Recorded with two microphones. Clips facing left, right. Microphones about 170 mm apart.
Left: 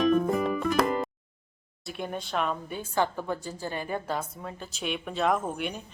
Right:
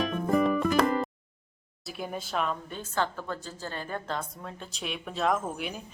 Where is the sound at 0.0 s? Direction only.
Centre (ahead or behind).